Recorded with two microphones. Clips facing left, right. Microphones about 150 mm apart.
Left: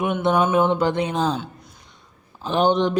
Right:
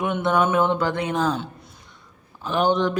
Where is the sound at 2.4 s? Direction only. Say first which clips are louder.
Left 2 dB; 25° left (ahead or behind).